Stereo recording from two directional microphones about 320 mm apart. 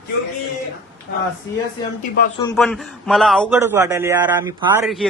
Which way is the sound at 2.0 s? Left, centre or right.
Left.